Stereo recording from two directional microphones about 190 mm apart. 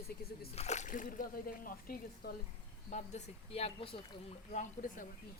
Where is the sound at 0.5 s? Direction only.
35° left (ahead or behind).